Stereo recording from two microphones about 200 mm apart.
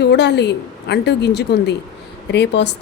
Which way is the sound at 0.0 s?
55° left (ahead or behind).